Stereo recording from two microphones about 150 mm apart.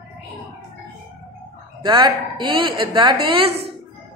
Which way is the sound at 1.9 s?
30° right (ahead or behind).